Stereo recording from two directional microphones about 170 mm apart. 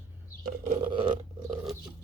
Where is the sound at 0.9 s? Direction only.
30° right (ahead or behind).